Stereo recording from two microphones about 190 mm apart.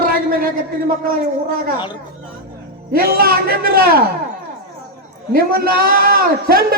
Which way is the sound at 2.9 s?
50° right (ahead or behind).